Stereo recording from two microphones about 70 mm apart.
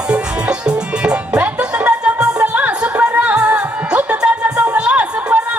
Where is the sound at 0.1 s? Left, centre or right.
Centre.